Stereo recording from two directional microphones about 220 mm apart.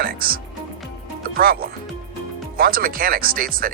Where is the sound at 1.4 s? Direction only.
40° right (ahead or behind).